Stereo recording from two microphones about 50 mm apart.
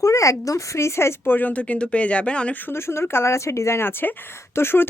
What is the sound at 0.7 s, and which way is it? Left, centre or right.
Speech, left.